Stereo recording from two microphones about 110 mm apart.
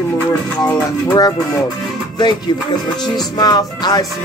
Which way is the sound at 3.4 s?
40° left (ahead or behind).